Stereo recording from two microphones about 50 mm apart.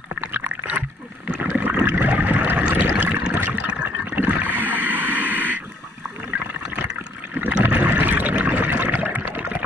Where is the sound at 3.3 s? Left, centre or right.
Right.